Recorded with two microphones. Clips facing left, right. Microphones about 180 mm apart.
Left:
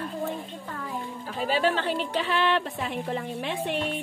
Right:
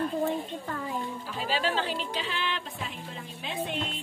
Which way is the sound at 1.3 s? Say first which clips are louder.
Left 5 dB; 55° left (ahead or behind).